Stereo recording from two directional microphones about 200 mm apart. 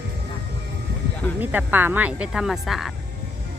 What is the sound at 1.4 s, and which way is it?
Speech, 10° right (ahead or behind).